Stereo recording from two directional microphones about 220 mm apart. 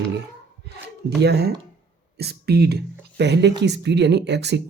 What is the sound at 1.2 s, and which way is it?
Speech, 50° right (ahead or behind).